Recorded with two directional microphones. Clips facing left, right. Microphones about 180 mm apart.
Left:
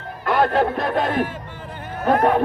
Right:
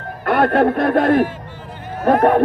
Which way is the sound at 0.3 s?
60° right (ahead or behind).